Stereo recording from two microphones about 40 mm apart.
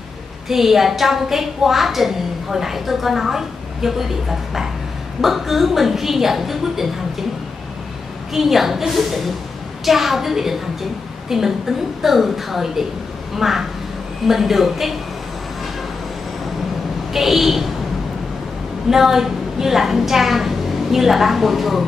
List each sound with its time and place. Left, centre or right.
0.5 s a woman's voice: centre
8.3 s a woman's voice: centre
17.1 s a woman's voice: centre
18.9 s a woman's voice: centre